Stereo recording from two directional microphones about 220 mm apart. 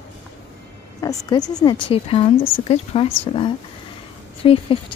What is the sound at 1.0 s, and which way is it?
Speech, 15° left (ahead or behind).